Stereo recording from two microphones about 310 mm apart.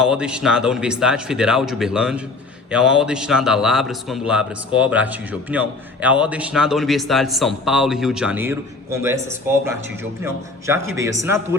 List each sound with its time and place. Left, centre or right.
0.0 s a man's voice: centre